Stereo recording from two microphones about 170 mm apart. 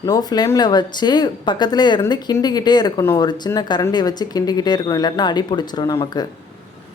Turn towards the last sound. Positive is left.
turn(degrees=20)  # may be behind; listen again after turning